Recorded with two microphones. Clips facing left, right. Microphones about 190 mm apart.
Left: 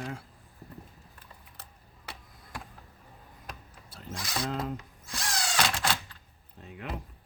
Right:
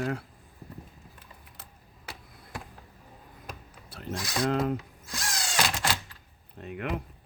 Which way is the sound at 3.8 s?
65° right (ahead or behind).